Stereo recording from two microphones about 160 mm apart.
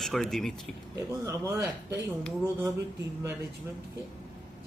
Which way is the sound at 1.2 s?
15° right (ahead or behind).